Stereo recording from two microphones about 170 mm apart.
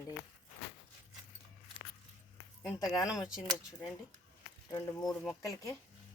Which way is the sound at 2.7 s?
20° left (ahead or behind).